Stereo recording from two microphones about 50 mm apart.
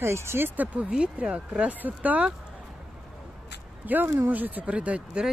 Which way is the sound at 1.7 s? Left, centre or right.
Right.